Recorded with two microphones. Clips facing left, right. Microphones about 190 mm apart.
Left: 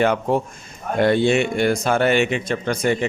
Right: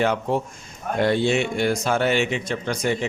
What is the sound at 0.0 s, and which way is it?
Speech, 55° left (ahead or behind).